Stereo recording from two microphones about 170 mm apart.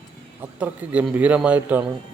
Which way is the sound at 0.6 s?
10° right (ahead or behind).